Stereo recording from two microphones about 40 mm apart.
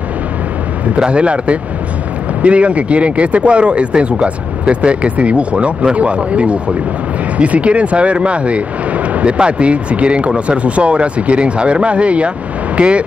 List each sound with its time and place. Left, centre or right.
0.9 s speech: right